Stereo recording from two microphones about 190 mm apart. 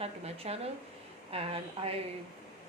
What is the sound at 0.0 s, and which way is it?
A woman's voice, 30° right (ahead or behind).